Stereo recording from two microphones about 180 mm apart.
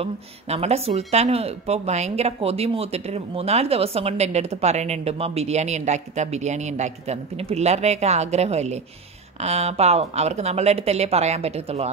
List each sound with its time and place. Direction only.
0.0 s speech: 35° right (ahead or behind)